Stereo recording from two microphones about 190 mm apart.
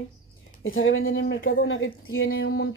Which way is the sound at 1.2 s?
50° left (ahead or behind).